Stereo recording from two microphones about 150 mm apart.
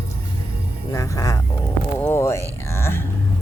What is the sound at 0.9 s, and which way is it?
Speech, 20° left (ahead or behind).